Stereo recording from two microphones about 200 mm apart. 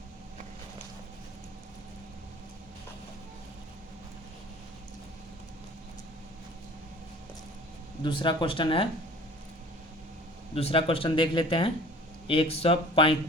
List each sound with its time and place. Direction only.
8.0 s speech: 25° left (ahead or behind)
10.5 s speech: 30° left (ahead or behind)